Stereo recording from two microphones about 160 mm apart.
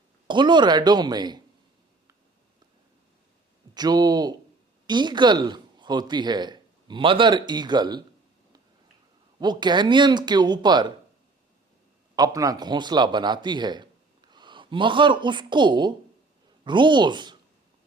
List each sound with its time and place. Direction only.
0.3 s speech: 30° right (ahead or behind)
3.8 s speech: 25° right (ahead or behind)
9.4 s speech: 25° right (ahead or behind)
12.1 s a man's voice: 25° right (ahead or behind)